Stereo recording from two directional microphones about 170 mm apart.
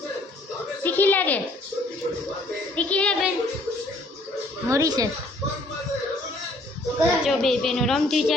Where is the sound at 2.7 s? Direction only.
10° left (ahead or behind).